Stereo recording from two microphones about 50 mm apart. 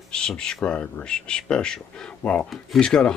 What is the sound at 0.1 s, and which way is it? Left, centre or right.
Speech, centre.